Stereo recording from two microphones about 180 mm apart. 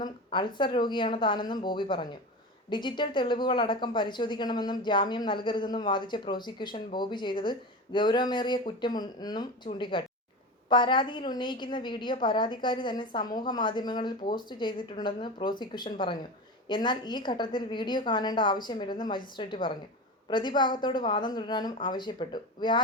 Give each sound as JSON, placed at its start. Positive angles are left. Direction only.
{"t": 0.0, "sound": "a woman's voice", "side_deg": 25}